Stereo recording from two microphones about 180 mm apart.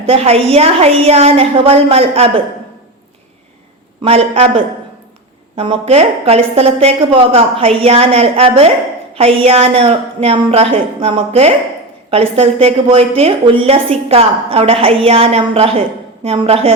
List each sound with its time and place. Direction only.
0.1 s a woman's voice: 35° right (ahead or behind)
4.0 s a woman's voice: 35° right (ahead or behind)